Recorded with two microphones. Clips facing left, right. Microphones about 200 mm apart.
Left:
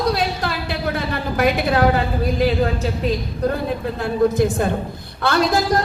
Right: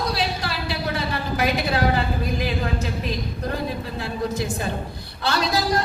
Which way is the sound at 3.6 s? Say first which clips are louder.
Left 6 dB; 55° left (ahead or behind).